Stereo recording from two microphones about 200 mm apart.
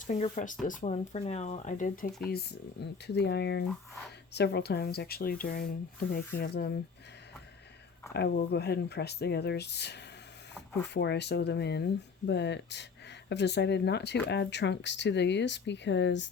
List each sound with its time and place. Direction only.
0.1 s speech: 35° left (ahead or behind)
2.8 s speech: 55° left (ahead or behind)
8.1 s speech: 50° left (ahead or behind)